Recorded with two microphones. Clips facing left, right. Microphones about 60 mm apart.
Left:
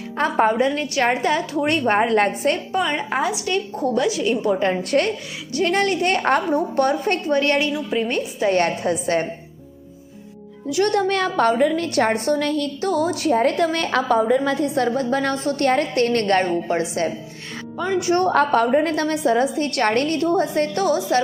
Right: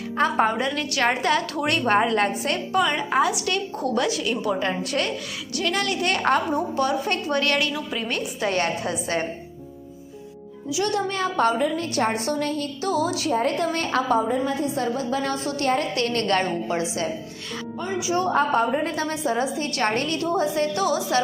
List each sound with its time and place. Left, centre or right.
0.6 s a woman's voice: left
3.4 s a woman's voice: centre
4.8 s a woman's voice: left
6.3 s a woman's voice: left
7.3 s a woman's voice: left
8.4 s a woman's voice: left
10.7 s a woman's voice: left
12.8 s a woman's voice: left
17.8 s a woman's voice: left